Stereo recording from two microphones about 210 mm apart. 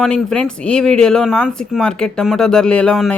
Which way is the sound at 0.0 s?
5° left (ahead or behind).